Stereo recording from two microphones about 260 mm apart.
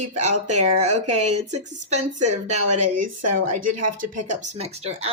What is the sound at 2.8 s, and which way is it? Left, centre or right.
Speech, right.